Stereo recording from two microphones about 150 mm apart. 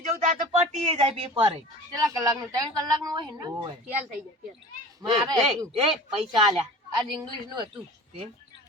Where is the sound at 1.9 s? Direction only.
20° right (ahead or behind).